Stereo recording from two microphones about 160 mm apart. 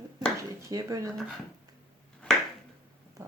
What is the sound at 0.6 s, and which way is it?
Speech, 20° right (ahead or behind).